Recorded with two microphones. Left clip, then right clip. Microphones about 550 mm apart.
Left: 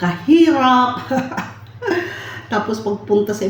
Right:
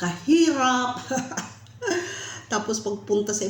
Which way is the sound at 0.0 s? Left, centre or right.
Right.